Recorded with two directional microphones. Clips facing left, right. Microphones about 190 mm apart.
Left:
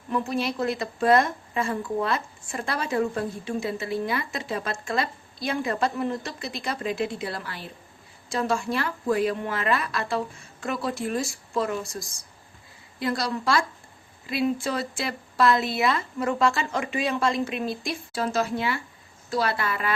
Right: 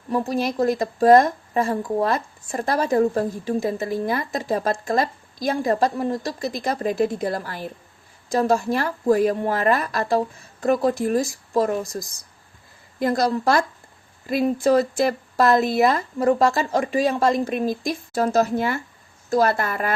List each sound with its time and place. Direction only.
0.1 s a woman's voice: 40° right (ahead or behind)
13.0 s a woman's voice: 45° right (ahead or behind)